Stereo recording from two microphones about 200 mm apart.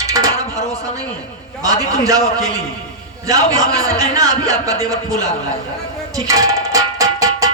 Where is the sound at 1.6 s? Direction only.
15° right (ahead or behind).